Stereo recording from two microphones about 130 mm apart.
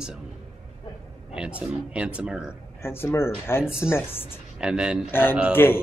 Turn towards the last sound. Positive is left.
turn(degrees=15)  # may be behind; listen again after turning